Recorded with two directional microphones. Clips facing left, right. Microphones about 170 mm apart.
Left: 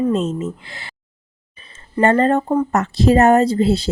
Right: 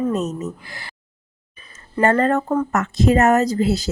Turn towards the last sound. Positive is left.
turn(degrees=30)  # may be behind; listen again after turning